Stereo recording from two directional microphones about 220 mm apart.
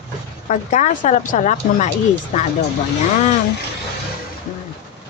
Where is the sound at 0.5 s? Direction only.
35° left (ahead or behind).